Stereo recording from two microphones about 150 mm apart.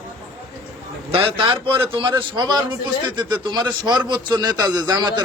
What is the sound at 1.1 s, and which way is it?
A man's voice, 35° right (ahead or behind).